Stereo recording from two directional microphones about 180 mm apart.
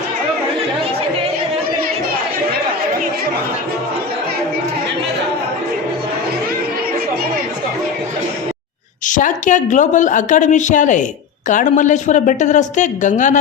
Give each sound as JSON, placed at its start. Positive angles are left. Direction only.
{"t": 9.0, "sound": "speech", "side_deg": 45}